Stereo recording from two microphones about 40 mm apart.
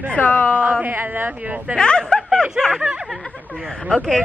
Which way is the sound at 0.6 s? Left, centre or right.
Right.